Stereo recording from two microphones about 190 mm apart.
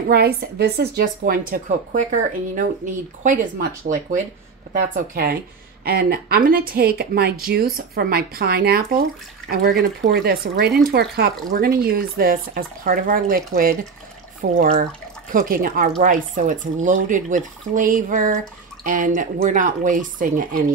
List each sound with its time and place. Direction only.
0.1 s speech: 55° right (ahead or behind)